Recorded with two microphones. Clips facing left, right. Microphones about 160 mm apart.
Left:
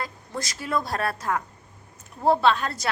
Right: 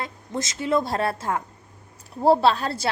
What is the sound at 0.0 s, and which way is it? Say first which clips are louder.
A woman's voice: right 3 dB; 25° right (ahead or behind).